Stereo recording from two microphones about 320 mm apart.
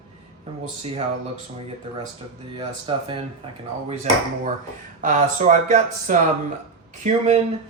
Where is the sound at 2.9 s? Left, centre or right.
Centre.